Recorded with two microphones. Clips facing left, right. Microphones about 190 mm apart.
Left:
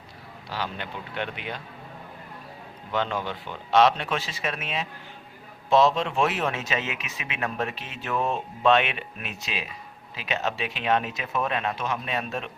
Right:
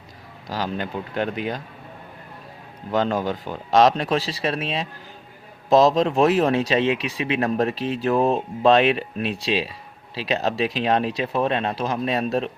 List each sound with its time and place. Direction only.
0.4 s speech: 40° right (ahead or behind)
2.9 s speech: 40° right (ahead or behind)